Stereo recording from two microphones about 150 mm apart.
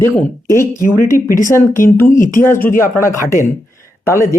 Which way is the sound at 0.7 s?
65° left (ahead or behind).